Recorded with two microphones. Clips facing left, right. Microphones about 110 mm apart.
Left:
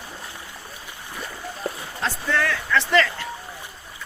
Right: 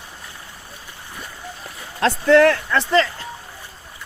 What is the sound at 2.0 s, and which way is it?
Speech, 75° right (ahead or behind).